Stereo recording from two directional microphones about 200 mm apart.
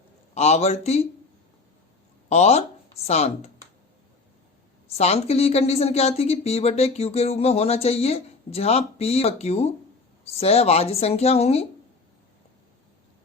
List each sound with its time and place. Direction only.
0.3 s speech: 35° left (ahead or behind)
2.3 s speech: 35° left (ahead or behind)
4.9 s speech: 30° left (ahead or behind)